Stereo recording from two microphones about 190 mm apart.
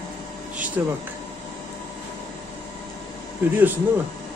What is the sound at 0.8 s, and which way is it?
Speech, 10° right (ahead or behind).